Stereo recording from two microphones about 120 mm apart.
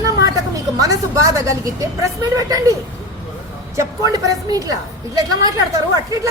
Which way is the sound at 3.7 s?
30° right (ahead or behind).